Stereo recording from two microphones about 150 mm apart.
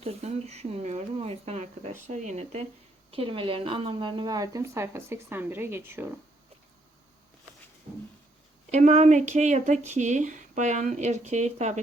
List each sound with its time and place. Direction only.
0.0 s speech: 45° right (ahead or behind); by 6.1 s 15° right (ahead or behind)
8.7 s speech: 50° right (ahead or behind)